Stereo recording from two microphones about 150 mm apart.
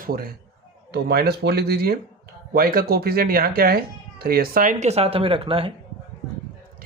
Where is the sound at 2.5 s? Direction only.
75° right (ahead or behind).